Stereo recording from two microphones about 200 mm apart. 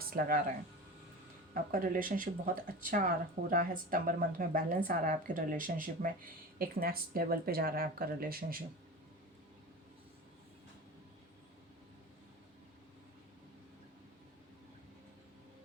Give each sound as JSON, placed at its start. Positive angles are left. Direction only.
{"t": 0.1, "sound": "speech", "side_deg": -45}
{"t": 1.7, "sound": "speech", "side_deg": -40}